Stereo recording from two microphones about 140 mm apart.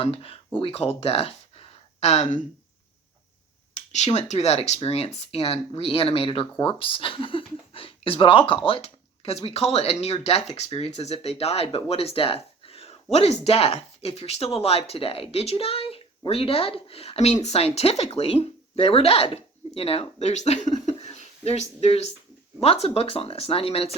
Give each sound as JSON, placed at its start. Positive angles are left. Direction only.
{"t": 0.0, "sound": "speech", "side_deg": 45}
{"t": 3.8, "sound": "speech", "side_deg": 55}